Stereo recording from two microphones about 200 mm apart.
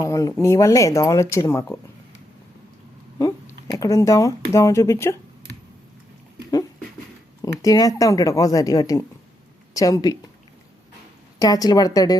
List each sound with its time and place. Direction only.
0.0 s speech: 15° left (ahead or behind)
3.2 s speech: 15° left (ahead or behind)
7.6 s speech: 15° left (ahead or behind)
11.3 s a woman's voice: 20° left (ahead or behind)